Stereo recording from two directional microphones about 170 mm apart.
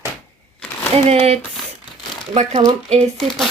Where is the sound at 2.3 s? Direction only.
40° right (ahead or behind).